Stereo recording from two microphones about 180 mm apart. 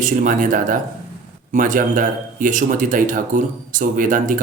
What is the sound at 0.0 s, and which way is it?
Speech, 45° right (ahead or behind).